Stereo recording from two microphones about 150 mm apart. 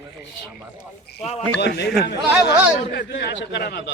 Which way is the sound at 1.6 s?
90° left.